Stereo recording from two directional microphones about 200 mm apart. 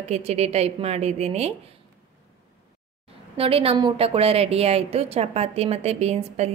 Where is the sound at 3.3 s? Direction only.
30° right (ahead or behind).